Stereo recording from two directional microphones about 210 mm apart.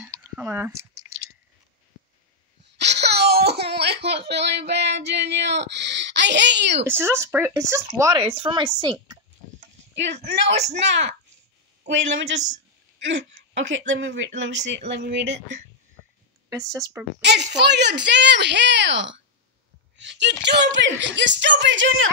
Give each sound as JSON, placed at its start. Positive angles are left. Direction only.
{"t": 0.0, "sound": "a sound", "side_deg": -10}
{"t": 2.8, "sound": "wail", "side_deg": -55}
{"t": 4.3, "sound": "speech", "side_deg": -55}
{"t": 6.9, "sound": "a woman's voice", "side_deg": -10}
{"t": 10.2, "sound": "speech", "side_deg": -55}
{"t": 13.6, "sound": "speech", "side_deg": -65}
{"t": 16.7, "sound": "speech", "side_deg": -15}
{"t": 17.2, "sound": "speech", "side_deg": -55}